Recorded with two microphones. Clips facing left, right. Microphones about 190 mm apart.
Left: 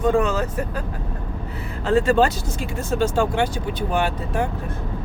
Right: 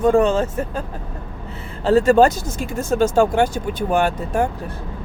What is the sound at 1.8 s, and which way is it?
Speech, 40° right (ahead or behind).